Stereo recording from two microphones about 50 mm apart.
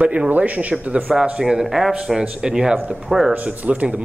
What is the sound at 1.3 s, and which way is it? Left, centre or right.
Speech, centre.